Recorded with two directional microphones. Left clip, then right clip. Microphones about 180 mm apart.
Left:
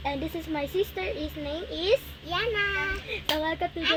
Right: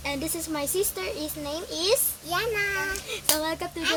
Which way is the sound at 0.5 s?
35° right (ahead or behind).